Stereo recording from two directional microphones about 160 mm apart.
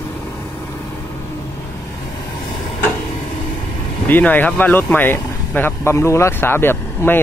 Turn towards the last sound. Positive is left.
turn(degrees=15)  # may be behind; listen again after turning